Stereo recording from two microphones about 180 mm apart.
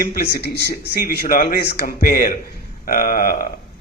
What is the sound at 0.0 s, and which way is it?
A man's voice, 60° left (ahead or behind).